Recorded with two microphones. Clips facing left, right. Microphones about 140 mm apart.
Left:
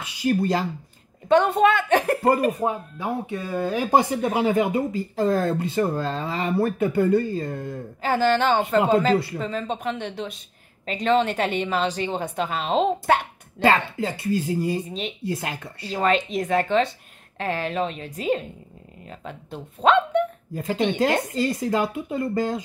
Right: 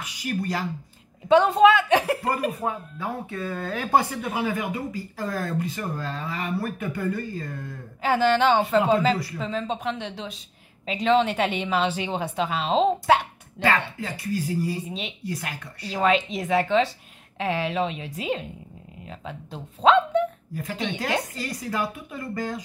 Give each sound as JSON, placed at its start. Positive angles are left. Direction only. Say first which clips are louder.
{"t": 0.0, "sound": "speech", "louder": "left 7 dB", "side_deg": 30}
{"t": 1.3, "sound": "a woman's voice", "louder": "right 1 dB", "side_deg": 0}
{"t": 2.6, "sound": "speech", "louder": "left 4 dB", "side_deg": 15}
{"t": 8.0, "sound": "a woman's voice", "louder": "even", "side_deg": 0}
{"t": 13.6, "sound": "speech", "louder": "left 4 dB", "side_deg": 25}
{"t": 14.9, "sound": "a woman's voice", "louder": "left 3 dB", "side_deg": 0}
{"t": 15.2, "sound": "speech", "louder": "left 4 dB", "side_deg": 30}
{"t": 15.9, "sound": "a woman's voice", "louder": "even", "side_deg": 0}
{"t": 20.5, "sound": "speech", "louder": "left 11 dB", "side_deg": 25}